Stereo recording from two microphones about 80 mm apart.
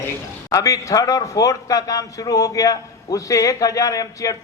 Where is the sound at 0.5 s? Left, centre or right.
Left.